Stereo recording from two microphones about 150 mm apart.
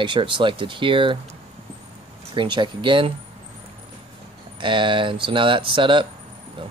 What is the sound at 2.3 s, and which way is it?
Speech, 35° right (ahead or behind).